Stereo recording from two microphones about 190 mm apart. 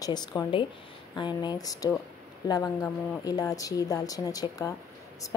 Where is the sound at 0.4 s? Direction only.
25° left (ahead or behind).